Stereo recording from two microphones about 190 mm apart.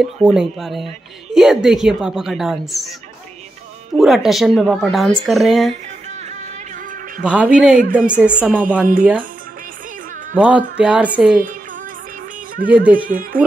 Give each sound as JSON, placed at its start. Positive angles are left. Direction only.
{"t": 0.3, "sound": "a woman's voice", "side_deg": 0}
{"t": 3.9, "sound": "a woman's voice", "side_deg": 0}
{"t": 6.0, "sound": "music", "side_deg": -35}
{"t": 7.2, "sound": "speech", "side_deg": -5}
{"t": 7.8, "sound": "speech", "side_deg": -45}
{"t": 8.4, "sound": "speech", "side_deg": -5}
{"t": 10.3, "sound": "a woman's voice", "side_deg": -10}
{"t": 12.6, "sound": "speech", "side_deg": -10}
{"t": 12.9, "sound": "speech", "side_deg": -45}